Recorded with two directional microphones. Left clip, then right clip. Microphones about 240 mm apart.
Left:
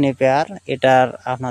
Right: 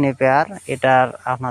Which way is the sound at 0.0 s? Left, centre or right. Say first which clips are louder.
Even; centre.